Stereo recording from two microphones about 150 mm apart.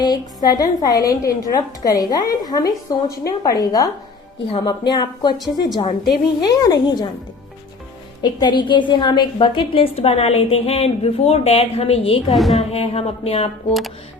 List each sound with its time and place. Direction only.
0.5 s a woman's voice: 25° left (ahead or behind)
8.2 s a woman's voice: 30° left (ahead or behind)
12.3 s a woman's voice: centre (ahead or behind)
12.7 s a woman's voice: 40° left (ahead or behind)